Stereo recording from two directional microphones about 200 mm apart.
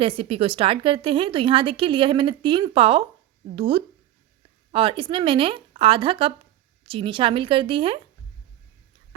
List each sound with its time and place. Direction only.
0.0 s a woman's voice: 30° right (ahead or behind)